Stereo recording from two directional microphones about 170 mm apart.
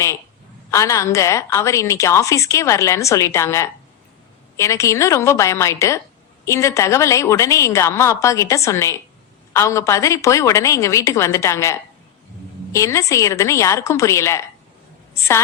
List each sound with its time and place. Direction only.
0.7 s a woman's voice: 20° left (ahead or behind)